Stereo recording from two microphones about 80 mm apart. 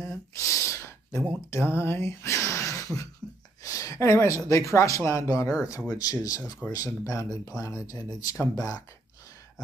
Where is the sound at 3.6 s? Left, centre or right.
Left.